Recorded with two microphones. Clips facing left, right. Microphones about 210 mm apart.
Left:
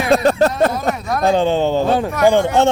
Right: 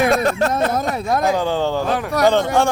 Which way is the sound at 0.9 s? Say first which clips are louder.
Right 2 dB; 25° right (ahead or behind).